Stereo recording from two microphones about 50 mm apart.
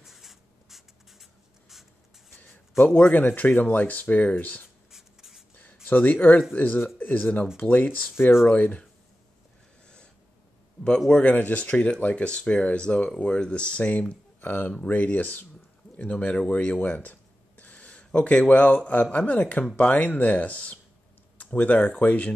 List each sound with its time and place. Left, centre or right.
0.0 s writing: centre
2.3 s a sound: left
2.8 s speech: left
4.9 s writing: centre
5.9 s speech: left
11.1 s speech: left
14.4 s speech: left
16.0 s speech: left